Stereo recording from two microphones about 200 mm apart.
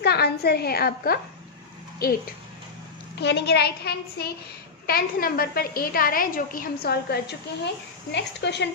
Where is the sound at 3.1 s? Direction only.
60° left (ahead or behind).